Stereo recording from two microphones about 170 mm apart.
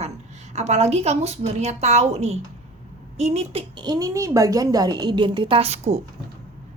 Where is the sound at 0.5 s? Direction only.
40° right (ahead or behind).